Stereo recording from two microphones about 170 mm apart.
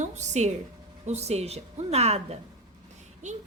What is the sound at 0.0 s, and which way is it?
A woman's voice, 45° right (ahead or behind).